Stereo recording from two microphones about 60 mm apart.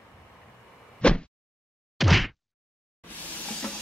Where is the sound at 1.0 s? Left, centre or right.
Centre.